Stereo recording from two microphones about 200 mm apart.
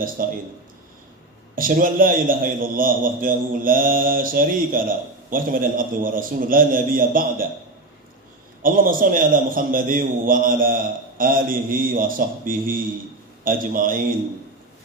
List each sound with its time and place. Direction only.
0.2 s a man's voice: 45° right (ahead or behind)
1.5 s a man's voice: 45° right (ahead or behind)
8.6 s a man's voice: 45° right (ahead or behind)